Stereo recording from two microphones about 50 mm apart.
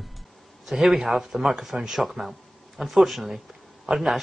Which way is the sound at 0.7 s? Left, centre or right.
Centre.